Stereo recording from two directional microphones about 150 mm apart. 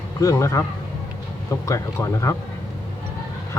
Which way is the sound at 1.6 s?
20° left (ahead or behind).